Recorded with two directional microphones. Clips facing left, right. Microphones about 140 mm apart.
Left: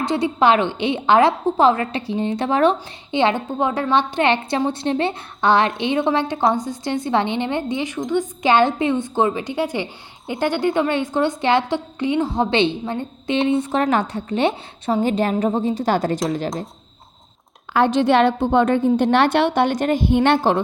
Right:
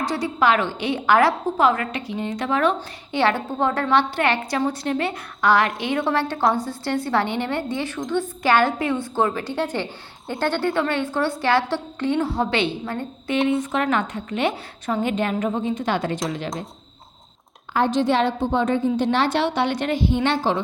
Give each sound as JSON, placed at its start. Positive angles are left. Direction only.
{"t": 0.0, "sound": "a woman's voice", "side_deg": 25}
{"t": 17.7, "sound": "a woman's voice", "side_deg": 70}